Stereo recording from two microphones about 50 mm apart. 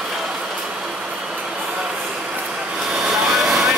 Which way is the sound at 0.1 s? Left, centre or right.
Centre.